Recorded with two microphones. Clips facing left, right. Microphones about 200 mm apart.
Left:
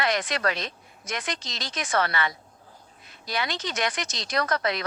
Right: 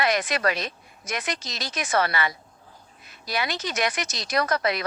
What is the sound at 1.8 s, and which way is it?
Speech, 20° right (ahead or behind).